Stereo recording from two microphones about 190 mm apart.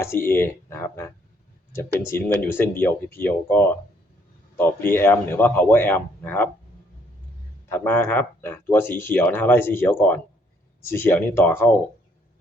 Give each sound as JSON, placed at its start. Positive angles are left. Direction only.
{"t": 0.0, "sound": "speech", "side_deg": 10}
{"t": 7.7, "sound": "speech", "side_deg": 10}